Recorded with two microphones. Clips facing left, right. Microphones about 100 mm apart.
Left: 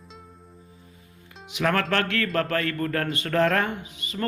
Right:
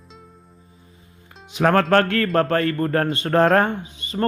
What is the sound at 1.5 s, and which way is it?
Speech, 40° right (ahead or behind).